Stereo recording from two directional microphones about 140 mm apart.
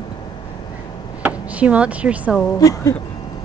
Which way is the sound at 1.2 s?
10° right (ahead or behind).